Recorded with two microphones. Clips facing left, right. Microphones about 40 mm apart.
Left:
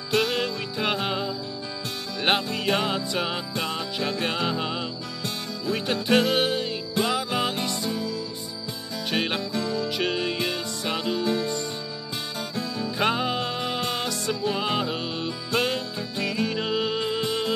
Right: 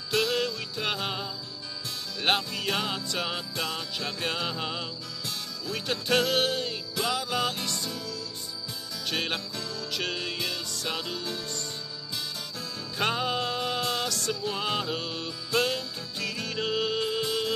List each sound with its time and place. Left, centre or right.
0.1 s music: left
9.5 s music: left